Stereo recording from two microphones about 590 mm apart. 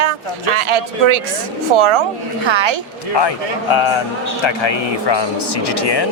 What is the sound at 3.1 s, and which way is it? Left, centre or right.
Speech, left.